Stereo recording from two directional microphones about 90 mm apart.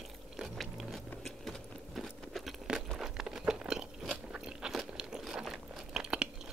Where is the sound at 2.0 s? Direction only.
Centre (ahead or behind).